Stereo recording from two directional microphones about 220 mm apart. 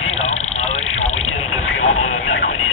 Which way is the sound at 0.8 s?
70° left (ahead or behind).